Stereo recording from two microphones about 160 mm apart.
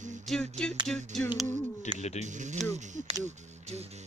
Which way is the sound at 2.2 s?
50° right (ahead or behind).